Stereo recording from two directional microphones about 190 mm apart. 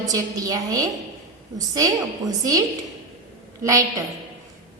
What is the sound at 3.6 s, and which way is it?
Speech, 15° right (ahead or behind).